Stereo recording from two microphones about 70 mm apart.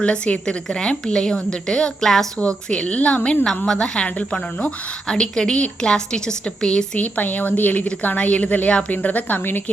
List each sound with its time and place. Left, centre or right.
0.0 s a woman's voice: centre